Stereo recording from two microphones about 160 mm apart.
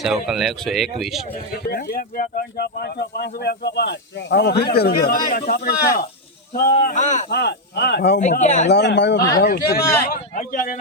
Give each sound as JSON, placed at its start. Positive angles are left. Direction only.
{"t": 0.0, "sound": "speech", "side_deg": 0}
{"t": 1.6, "sound": "speech", "side_deg": 75}
{"t": 6.6, "sound": "speech", "side_deg": 65}
{"t": 7.3, "sound": "speech", "side_deg": 90}
{"t": 8.2, "sound": "speech", "side_deg": 50}
{"t": 8.7, "sound": "speech", "side_deg": 90}
{"t": 9.4, "sound": "speech", "side_deg": 70}